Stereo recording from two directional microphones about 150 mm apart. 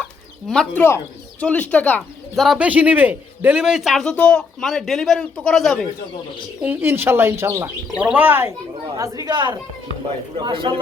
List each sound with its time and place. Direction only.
0.0 s chicken: 5° left (ahead or behind)
1.7 s speech: 10° left (ahead or behind)
2.3 s a man's voice: centre (ahead or behind)
6.6 s speech: 15° right (ahead or behind)
9.0 s a woman's voice: 25° right (ahead or behind)